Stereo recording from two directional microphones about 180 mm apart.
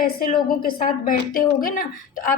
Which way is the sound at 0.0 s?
55° left (ahead or behind).